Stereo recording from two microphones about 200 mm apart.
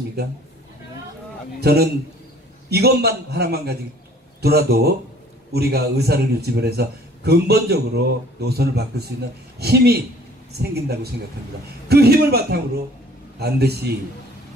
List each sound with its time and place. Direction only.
1.6 s a man's voice: 55° right (ahead or behind)